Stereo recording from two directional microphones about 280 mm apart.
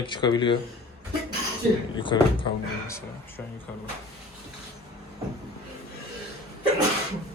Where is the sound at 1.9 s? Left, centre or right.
Centre.